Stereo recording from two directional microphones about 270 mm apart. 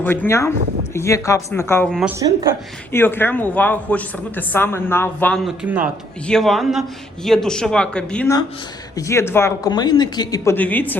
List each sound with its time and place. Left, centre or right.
0.0 s speech: centre
2.1 s speech: centre
2.9 s speech: centre